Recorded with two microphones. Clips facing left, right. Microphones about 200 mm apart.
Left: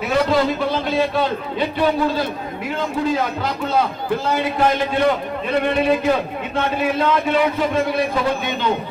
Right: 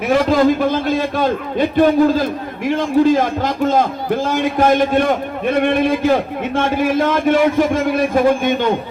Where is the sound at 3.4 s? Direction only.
45° right (ahead or behind).